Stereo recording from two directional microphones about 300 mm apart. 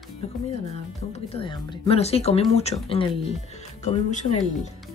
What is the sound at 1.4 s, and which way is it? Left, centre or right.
Speech, centre.